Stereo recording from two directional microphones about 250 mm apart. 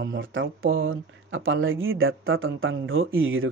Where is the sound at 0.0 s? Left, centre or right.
Right.